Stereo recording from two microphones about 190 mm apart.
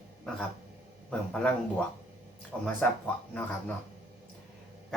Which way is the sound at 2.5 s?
5° left (ahead or behind).